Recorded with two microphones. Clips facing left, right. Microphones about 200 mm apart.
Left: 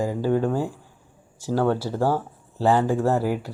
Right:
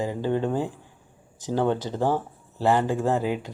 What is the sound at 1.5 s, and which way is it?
Speech, 20° right (ahead or behind).